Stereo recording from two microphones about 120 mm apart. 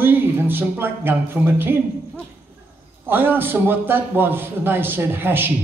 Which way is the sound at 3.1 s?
15° right (ahead or behind).